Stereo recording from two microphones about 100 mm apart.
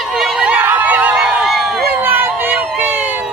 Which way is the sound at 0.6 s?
20° right (ahead or behind).